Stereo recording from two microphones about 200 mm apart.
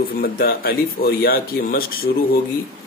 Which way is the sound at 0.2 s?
50° left (ahead or behind).